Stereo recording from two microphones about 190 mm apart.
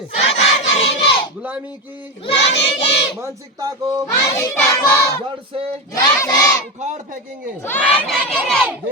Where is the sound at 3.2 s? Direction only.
15° right (ahead or behind).